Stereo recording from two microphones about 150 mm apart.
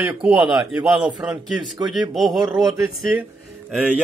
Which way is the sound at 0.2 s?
10° right (ahead or behind).